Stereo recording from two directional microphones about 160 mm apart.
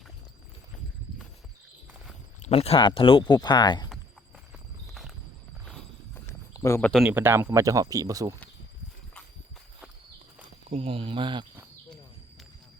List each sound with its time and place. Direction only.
2.4 s speech: 40° left (ahead or behind)
4.9 s walk: centre (ahead or behind)
6.2 s a sound: 20° left (ahead or behind)
7.1 s speech: 15° right (ahead or behind)
10.7 s speech: 35° right (ahead or behind)